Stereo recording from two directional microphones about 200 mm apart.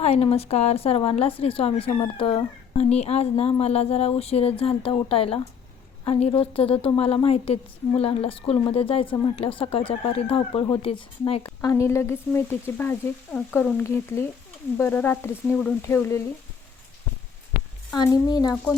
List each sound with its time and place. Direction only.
0.0 s a woman's voice: 30° left (ahead or behind)
11.6 s frying: 15° left (ahead or behind)
17.9 s a woman's voice: 20° left (ahead or behind)